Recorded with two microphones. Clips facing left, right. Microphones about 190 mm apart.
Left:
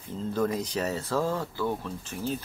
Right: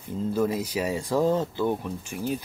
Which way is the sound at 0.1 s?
10° right (ahead or behind).